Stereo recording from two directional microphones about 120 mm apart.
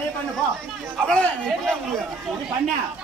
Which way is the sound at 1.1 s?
5° left (ahead or behind).